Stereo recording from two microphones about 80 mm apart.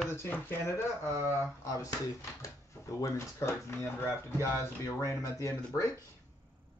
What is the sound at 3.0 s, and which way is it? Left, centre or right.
Speech, left.